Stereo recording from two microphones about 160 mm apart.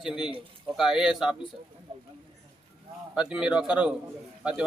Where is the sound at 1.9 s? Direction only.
30° right (ahead or behind).